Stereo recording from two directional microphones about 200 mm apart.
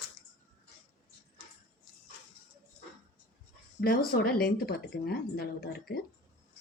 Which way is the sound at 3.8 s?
50° left (ahead or behind).